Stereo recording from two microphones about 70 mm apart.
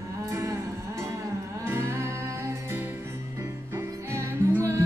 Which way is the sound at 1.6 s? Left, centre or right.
Right.